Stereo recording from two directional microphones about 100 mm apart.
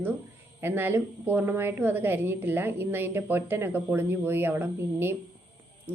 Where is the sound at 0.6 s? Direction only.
20° right (ahead or behind).